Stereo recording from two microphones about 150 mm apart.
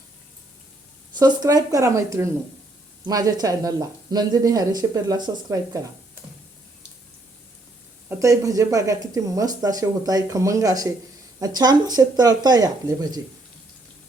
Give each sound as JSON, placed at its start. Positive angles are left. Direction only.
{"t": 1.2, "sound": "speech", "side_deg": -25}
{"t": 8.2, "sound": "speech", "side_deg": -20}